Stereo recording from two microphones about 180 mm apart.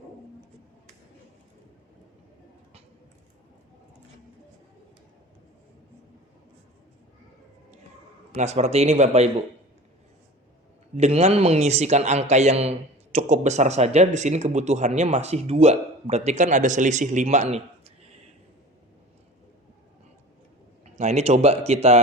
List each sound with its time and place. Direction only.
8.3 s speech: 40° right (ahead or behind)
10.9 s speech: 35° right (ahead or behind)
20.9 s speech: 40° right (ahead or behind)